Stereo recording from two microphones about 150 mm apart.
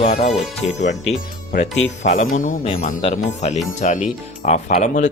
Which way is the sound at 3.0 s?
50° left (ahead or behind).